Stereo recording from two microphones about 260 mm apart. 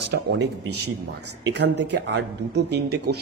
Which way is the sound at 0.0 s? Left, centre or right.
Right.